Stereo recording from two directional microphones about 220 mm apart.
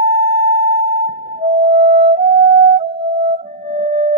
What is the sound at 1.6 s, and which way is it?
Music, 35° right (ahead or behind).